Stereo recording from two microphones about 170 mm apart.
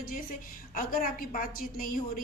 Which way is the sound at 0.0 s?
55° left (ahead or behind).